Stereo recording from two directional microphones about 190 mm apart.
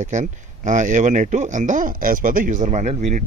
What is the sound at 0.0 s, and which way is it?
Speech, 40° right (ahead or behind).